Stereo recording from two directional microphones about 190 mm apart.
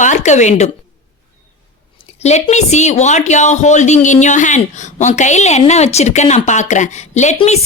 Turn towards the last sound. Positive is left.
turn(degrees=35)  # may be behind; listen again after turning